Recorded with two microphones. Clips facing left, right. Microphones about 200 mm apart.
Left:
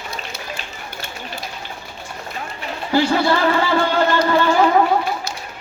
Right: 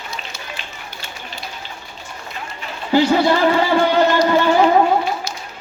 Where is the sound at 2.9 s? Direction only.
20° right (ahead or behind).